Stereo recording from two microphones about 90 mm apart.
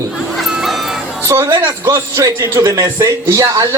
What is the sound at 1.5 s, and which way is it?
Speech, 50° right (ahead or behind).